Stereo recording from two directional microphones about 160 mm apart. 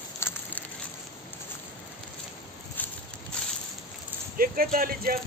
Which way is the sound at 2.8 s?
10° left (ahead or behind).